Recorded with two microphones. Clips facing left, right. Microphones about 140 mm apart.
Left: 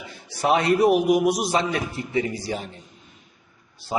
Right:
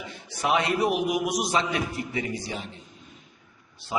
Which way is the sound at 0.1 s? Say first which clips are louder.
Left 4 dB; 35° left (ahead or behind).